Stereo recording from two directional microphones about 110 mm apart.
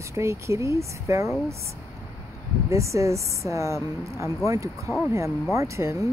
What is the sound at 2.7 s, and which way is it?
Speech, 25° right (ahead or behind).